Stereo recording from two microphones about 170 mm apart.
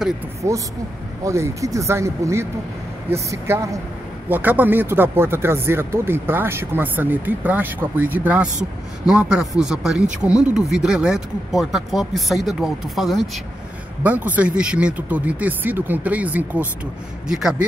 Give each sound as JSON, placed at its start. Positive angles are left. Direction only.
{"t": 0.4, "sound": "speech", "side_deg": -15}